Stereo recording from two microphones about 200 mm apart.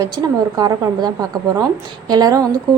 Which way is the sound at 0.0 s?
20° right (ahead or behind).